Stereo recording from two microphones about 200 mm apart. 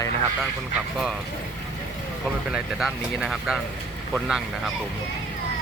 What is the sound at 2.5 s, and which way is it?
Speech, 5° right (ahead or behind).